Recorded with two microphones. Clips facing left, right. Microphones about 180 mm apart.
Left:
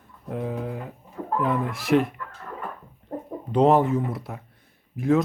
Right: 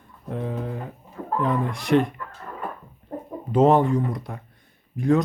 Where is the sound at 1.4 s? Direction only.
5° left (ahead or behind).